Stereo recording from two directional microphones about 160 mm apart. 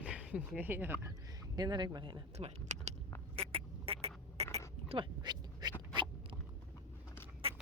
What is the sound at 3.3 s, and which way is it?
Rodents, 35° right (ahead or behind).